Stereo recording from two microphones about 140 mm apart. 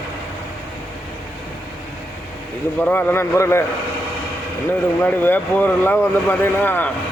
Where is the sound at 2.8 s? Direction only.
15° left (ahead or behind).